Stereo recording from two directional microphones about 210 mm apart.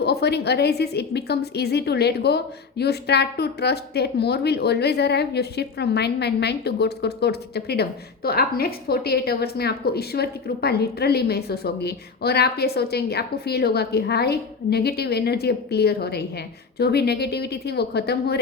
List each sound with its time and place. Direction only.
0.0 s a woman's voice: 50° left (ahead or behind)